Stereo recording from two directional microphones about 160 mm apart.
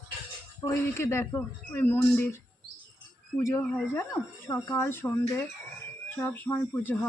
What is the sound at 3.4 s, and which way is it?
Speech, 15° left (ahead or behind).